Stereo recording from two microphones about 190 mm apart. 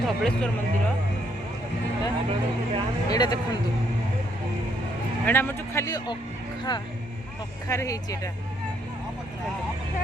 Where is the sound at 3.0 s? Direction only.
20° left (ahead or behind).